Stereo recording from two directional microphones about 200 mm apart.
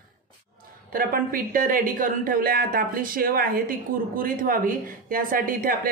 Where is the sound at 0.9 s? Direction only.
45° right (ahead or behind).